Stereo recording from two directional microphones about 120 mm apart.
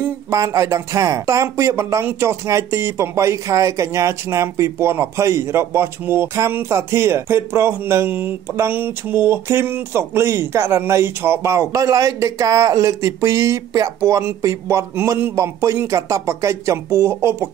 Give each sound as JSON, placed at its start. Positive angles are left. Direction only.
{"t": 0.0, "sound": "speech", "side_deg": -25}